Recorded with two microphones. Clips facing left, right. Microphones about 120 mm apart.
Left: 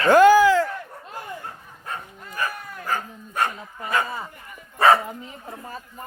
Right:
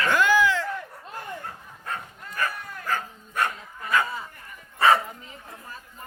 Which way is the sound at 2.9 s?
20° left (ahead or behind).